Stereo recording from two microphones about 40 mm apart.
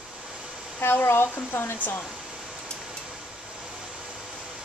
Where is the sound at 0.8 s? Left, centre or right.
Left.